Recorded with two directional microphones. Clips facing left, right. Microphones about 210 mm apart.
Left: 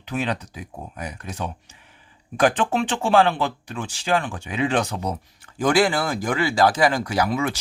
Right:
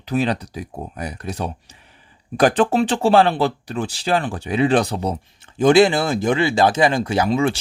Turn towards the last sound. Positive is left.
turn(degrees=-30)  # may be behind; listen again after turning